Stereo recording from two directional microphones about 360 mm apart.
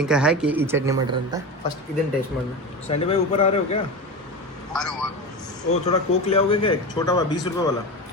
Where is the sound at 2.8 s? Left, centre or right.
Centre.